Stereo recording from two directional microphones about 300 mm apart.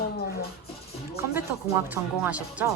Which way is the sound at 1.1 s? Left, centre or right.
Centre.